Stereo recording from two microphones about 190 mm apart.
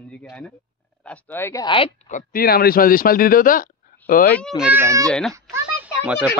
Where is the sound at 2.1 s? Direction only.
50° left (ahead or behind).